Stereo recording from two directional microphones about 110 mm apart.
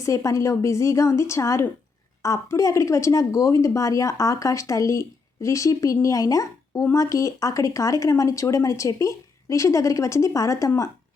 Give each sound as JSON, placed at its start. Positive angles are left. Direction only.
{"t": 0.0, "sound": "speech", "side_deg": 30}